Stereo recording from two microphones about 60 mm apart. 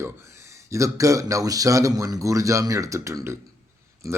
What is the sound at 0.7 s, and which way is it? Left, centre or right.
Speech, right.